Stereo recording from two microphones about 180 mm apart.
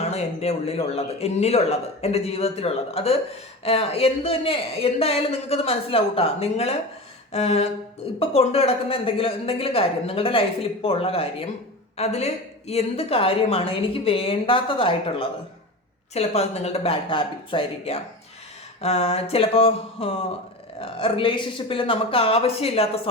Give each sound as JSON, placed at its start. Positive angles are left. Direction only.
{"t": 0.1, "sound": "a woman's voice", "side_deg": 35}